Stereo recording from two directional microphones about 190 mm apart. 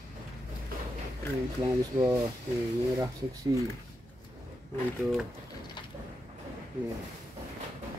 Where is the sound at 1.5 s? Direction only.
15° right (ahead or behind).